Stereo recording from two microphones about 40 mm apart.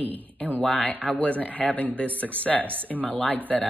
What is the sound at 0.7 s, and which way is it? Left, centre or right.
Speech, left.